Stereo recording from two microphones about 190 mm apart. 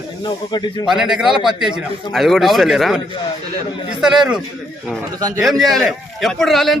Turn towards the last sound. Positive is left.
turn(degrees=0)  # may be behind; listen again after turning